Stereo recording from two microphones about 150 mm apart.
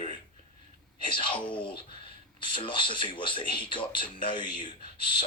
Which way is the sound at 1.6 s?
35° left (ahead or behind).